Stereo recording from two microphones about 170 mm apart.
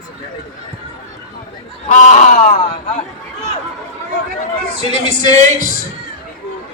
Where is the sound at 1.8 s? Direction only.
45° left (ahead or behind).